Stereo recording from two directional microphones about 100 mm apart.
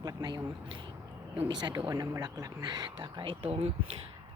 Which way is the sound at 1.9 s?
35° right (ahead or behind).